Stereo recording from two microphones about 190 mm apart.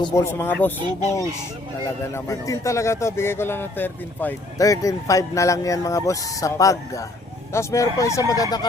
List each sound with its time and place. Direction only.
0.0 s speech: 15° left (ahead or behind)
2.1 s speech: 15° left (ahead or behind)